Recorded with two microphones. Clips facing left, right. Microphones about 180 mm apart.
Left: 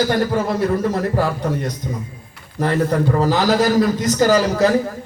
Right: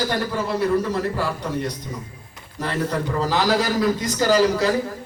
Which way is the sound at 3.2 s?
50° left (ahead or behind).